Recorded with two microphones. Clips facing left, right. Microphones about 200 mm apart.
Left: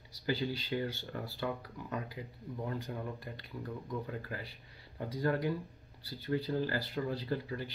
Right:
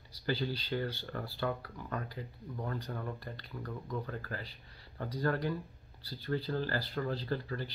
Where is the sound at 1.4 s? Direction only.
10° left (ahead or behind).